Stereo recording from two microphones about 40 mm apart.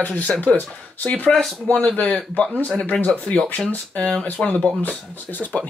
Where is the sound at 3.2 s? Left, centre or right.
Left.